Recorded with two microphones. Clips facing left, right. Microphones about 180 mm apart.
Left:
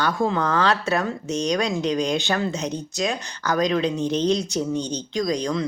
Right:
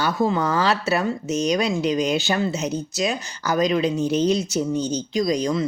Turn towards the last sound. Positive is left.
turn(degrees=-5)  # may be behind; listen again after turning